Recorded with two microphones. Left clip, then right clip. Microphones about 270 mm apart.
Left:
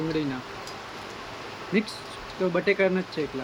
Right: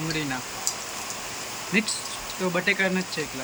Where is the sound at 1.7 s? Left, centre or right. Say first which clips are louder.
Right 3 dB; centre.